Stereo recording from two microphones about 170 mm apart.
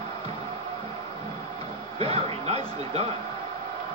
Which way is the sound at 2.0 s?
35° right (ahead or behind).